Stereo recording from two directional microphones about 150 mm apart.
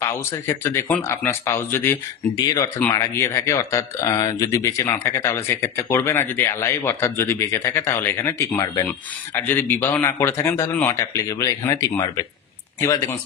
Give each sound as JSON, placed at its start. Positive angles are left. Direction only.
{"t": 0.3, "sound": "speech", "side_deg": 15}